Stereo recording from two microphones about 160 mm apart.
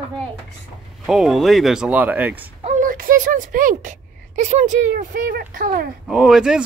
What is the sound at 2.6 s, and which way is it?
Speech, 55° right (ahead or behind).